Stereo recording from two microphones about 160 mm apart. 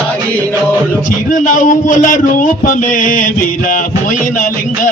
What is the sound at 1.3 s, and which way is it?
A man's voice, 55° left (ahead or behind).